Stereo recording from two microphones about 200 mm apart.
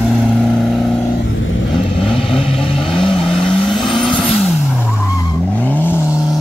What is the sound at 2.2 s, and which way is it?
Vehicle, centre (ahead or behind).